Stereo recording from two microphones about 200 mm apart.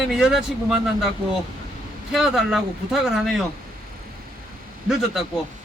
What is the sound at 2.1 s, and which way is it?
Speech, centre (ahead or behind).